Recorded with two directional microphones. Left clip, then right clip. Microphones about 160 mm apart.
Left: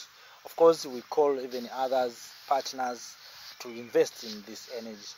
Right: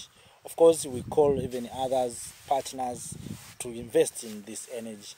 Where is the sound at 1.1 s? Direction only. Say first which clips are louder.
Right 2 dB; 15° left (ahead or behind).